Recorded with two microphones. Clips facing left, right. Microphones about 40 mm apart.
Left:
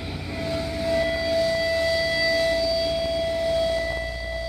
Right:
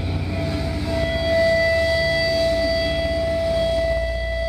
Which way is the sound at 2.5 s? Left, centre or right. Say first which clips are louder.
Right 3 dB; centre.